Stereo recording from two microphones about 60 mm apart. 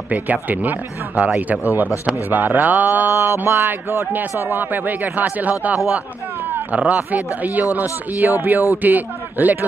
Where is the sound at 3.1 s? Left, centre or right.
Right.